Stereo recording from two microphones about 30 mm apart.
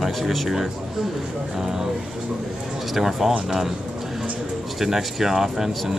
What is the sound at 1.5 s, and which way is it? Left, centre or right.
Speech, centre.